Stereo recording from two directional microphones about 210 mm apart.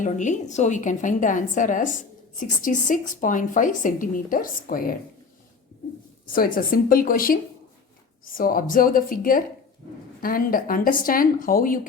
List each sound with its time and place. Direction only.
0.0 s a woman's voice: 35° left (ahead or behind)
6.2 s a woman's voice: 40° left (ahead or behind)